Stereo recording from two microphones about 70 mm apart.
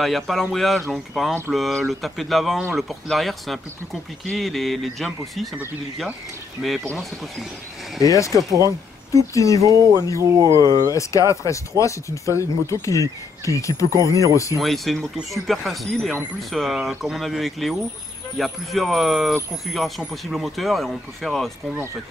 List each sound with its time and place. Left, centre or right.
0.0 s speech: centre
8.0 s speech: left
8.3 s speech: centre
8.6 s speech: left
10.3 s speech: right
10.9 s speech: left
14.6 s speech: centre